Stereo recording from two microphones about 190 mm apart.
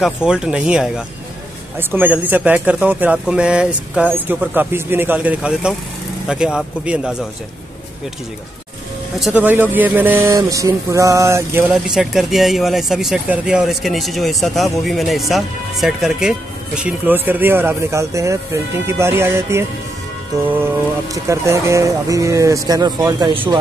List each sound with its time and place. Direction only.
0.0 s speech: 5° right (ahead or behind)
9.2 s speech: 10° right (ahead or behind)
11.7 s speech: centre (ahead or behind)
21.1 s speech: 15° right (ahead or behind)